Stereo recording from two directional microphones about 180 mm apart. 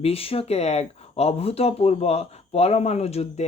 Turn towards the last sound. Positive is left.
turn(degrees=35)  # may be behind; listen again after turning